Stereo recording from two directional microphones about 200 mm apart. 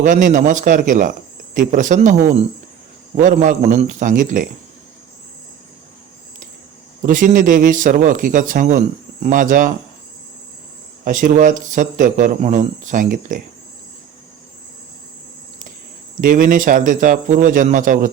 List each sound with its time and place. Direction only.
0.0 s speech: 40° right (ahead or behind)
7.0 s speech: 40° right (ahead or behind)
11.0 s speech: 45° right (ahead or behind)
16.2 s speech: 40° right (ahead or behind)